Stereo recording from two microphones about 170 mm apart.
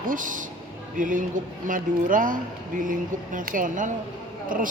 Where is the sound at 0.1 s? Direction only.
50° right (ahead or behind).